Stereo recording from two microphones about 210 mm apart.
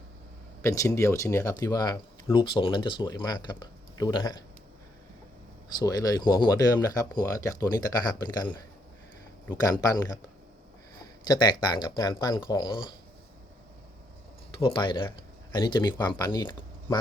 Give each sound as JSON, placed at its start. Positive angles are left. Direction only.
{"t": 0.6, "sound": "speech", "side_deg": 15}
{"t": 5.8, "sound": "speech", "side_deg": 15}
{"t": 11.2, "sound": "speech", "side_deg": 20}
{"t": 14.6, "sound": "speech", "side_deg": 25}